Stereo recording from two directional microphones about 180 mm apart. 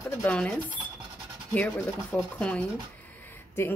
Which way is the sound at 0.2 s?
5° left (ahead or behind).